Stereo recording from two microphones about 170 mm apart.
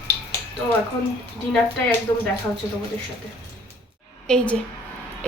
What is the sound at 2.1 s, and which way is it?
Speech, 25° left (ahead or behind).